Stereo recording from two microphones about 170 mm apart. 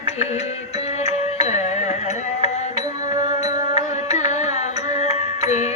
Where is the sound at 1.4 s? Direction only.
40° left (ahead or behind).